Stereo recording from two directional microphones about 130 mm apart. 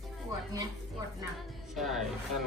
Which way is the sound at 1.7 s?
Centre (ahead or behind).